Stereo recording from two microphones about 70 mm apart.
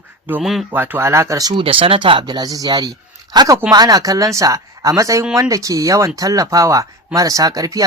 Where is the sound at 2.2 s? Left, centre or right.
Right.